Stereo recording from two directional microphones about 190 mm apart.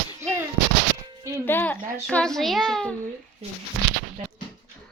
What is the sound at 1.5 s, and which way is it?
A child's voice, 10° left (ahead or behind).